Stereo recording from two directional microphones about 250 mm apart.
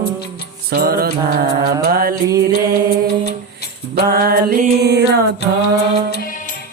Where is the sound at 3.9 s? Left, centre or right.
Right.